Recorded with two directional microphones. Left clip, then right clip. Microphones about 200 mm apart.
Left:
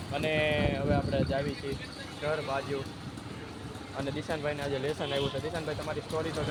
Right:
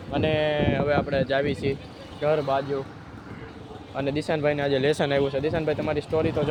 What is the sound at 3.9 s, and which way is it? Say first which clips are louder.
Speech: right 9 dB; 50° right (ahead or behind).